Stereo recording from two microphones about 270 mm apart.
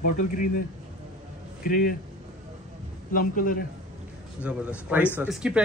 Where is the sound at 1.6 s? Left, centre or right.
Left.